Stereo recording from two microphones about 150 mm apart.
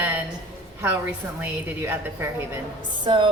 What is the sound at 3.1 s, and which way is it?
Speech, 35° right (ahead or behind).